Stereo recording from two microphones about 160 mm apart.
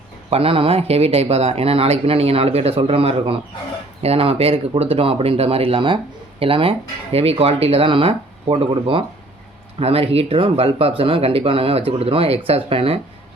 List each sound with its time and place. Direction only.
0.3 s speech: 35° right (ahead or behind)